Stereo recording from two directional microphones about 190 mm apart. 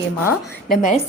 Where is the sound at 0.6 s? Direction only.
45° left (ahead or behind).